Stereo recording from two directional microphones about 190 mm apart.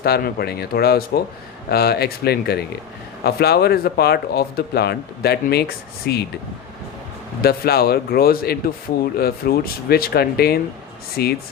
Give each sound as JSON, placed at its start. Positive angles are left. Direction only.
{"t": 0.0, "sound": "speech", "side_deg": 55}
{"t": 7.4, "sound": "speech", "side_deg": 55}